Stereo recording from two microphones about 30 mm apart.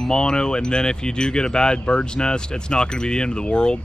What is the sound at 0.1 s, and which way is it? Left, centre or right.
Speech, left.